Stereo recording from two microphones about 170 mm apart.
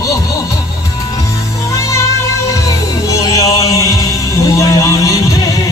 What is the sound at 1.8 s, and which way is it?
Music, 20° left (ahead or behind).